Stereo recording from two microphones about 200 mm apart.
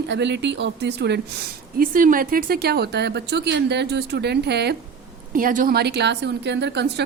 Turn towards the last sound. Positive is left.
turn(degrees=-55)  # may be behind; listen again after turning